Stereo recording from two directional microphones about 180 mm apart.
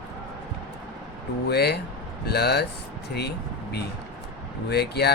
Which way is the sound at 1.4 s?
65° left (ahead or behind).